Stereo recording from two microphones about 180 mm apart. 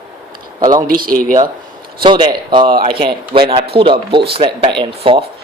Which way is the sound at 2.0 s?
25° right (ahead or behind).